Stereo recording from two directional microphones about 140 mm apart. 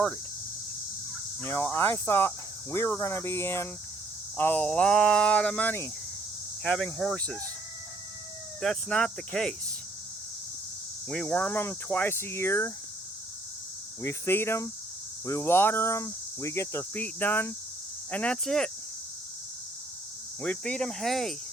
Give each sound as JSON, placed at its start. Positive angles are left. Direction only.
{"t": 1.4, "sound": "speech", "side_deg": 15}
{"t": 6.6, "sound": "cricket", "side_deg": 5}
{"t": 8.6, "sound": "cricket", "side_deg": 5}
{"t": 11.1, "sound": "speech", "side_deg": 10}
{"t": 14.0, "sound": "speech", "side_deg": 20}
{"t": 20.4, "sound": "cricket", "side_deg": 10}